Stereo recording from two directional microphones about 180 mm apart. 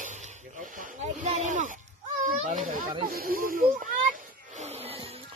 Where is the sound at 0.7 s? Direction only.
45° right (ahead or behind).